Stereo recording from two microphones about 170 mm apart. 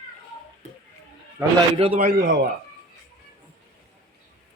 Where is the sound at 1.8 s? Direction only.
40° right (ahead or behind).